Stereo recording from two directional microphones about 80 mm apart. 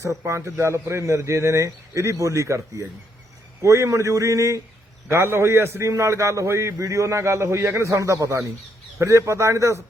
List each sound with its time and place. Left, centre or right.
0.0 s a man's voice: right
5.0 s a man's voice: right